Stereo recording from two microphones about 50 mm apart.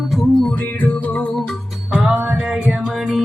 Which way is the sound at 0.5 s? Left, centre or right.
Left.